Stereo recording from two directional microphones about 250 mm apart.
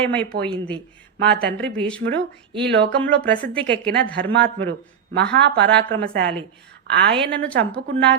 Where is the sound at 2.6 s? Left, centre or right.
Right.